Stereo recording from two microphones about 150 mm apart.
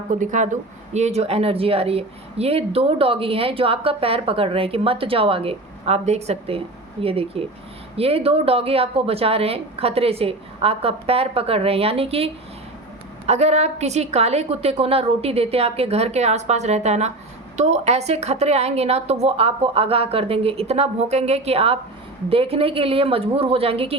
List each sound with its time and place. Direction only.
0.1 s a woman's voice: 55° right (ahead or behind); by 24.0 s 40° right (ahead or behind)